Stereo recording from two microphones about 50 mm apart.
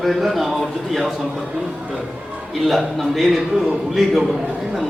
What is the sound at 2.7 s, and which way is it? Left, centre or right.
A man's voice, centre.